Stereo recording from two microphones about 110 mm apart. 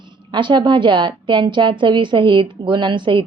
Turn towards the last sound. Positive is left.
turn(degrees=-45)  # may be behind; listen again after turning